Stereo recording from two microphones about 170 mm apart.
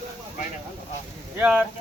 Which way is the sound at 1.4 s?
10° right (ahead or behind).